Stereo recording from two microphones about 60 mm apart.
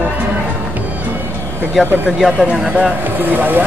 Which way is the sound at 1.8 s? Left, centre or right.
Centre.